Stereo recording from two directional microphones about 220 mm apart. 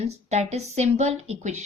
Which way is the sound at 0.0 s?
30° right (ahead or behind).